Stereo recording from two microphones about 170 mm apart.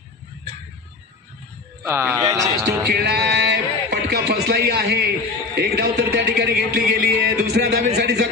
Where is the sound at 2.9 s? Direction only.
75° right (ahead or behind).